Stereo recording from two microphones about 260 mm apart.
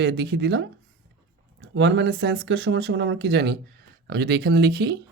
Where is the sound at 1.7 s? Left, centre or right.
Right.